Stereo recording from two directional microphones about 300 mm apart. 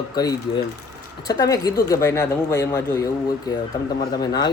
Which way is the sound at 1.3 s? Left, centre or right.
Centre.